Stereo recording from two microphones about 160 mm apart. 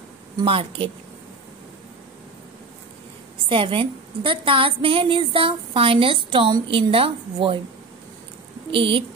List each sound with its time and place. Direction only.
0.4 s a woman's voice: 35° right (ahead or behind)
3.4 s a woman's voice: 35° right (ahead or behind)
8.7 s a woman's voice: 35° right (ahead or behind)